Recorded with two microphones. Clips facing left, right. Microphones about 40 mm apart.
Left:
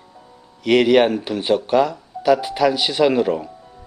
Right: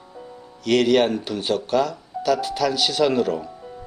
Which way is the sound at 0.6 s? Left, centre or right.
Centre.